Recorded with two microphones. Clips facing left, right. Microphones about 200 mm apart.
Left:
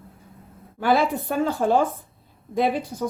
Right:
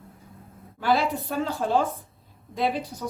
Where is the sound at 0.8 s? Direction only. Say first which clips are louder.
Left 3 dB; 50° left (ahead or behind).